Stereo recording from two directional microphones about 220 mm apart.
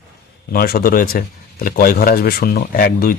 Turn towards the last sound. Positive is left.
turn(degrees=40)  # may be behind; listen again after turning